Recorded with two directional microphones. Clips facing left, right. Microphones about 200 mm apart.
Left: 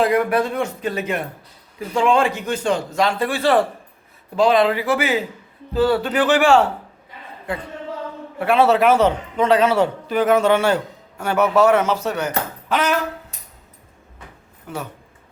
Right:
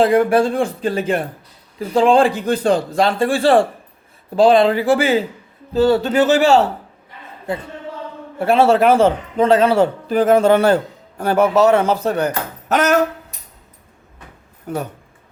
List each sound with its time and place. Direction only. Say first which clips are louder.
0.0 s speech: right 4 dB; 30° right (ahead or behind)
6.4 s speech: right 2 dB; 40° right (ahead or behind)
8.4 s a man's voice: right 2 dB; 40° right (ahead or behind)
11.2 s speech: right 2 dB; 30° right (ahead or behind)
12.6 s speech: right 6 dB; 45° right (ahead or behind)
14.7 s speech: right 6 dB; 40° right (ahead or behind)